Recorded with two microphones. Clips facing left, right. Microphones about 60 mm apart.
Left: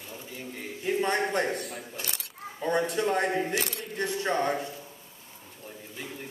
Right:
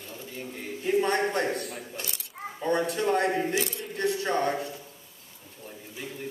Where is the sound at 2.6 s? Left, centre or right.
Centre.